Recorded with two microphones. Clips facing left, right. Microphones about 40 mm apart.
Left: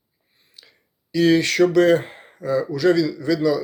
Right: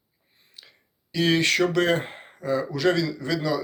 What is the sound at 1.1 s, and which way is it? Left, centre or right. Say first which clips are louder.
Speech: left 5 dB; right.